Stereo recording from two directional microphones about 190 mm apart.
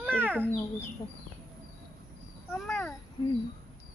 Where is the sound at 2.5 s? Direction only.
Centre (ahead or behind).